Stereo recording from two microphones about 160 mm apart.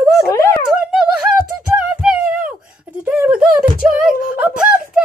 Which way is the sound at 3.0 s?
10° right (ahead or behind).